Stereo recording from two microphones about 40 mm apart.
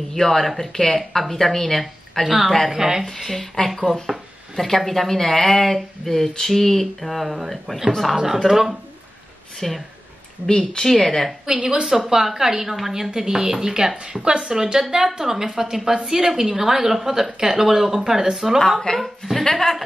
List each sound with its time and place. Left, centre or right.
0.1 s speech: centre
2.2 s a woman's voice: centre
3.0 s speech: centre
8.2 s a woman's voice: centre
9.6 s speech: centre
11.4 s a woman's voice: centre
18.8 s speech: centre